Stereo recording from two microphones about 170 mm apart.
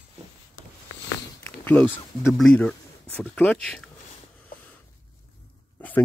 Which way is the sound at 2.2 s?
Centre (ahead or behind).